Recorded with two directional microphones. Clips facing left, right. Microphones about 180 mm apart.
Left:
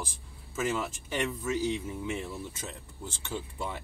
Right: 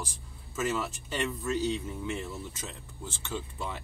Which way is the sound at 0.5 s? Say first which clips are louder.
Even; 10° left (ahead or behind).